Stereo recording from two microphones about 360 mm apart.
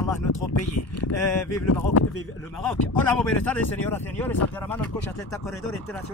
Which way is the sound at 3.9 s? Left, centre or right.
Centre.